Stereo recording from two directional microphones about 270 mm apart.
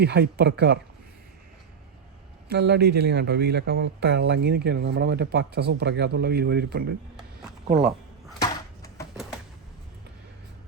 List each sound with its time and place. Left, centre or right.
0.0 s speech: right
2.5 s speech: right
8.4 s a sound: centre